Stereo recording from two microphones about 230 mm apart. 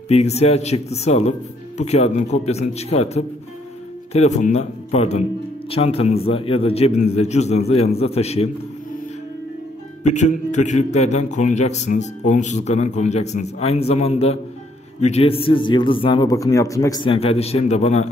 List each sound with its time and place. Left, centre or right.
0.1 s a man's voice: left
10.1 s a man's voice: left